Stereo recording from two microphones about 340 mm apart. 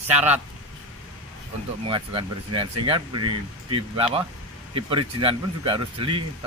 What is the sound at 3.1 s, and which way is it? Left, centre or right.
Speech, right.